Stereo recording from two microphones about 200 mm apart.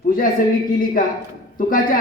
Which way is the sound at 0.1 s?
45° left (ahead or behind).